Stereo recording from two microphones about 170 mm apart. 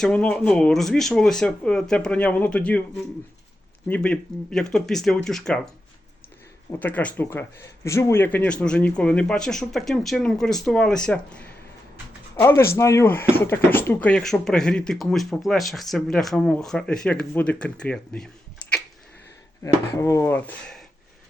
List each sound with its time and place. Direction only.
0.0 s speech: 5° left (ahead or behind)
6.7 s speech: 10° left (ahead or behind)
19.6 s speech: 15° left (ahead or behind)